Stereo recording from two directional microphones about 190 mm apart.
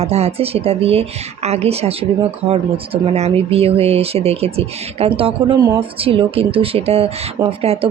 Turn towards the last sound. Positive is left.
turn(degrees=-30)  # may be behind; listen again after turning